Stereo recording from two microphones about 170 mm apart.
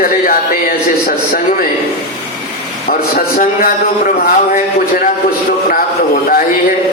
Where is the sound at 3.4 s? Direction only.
60° left (ahead or behind).